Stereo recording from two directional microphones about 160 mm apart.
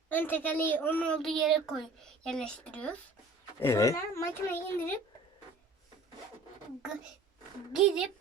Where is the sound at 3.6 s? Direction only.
20° left (ahead or behind).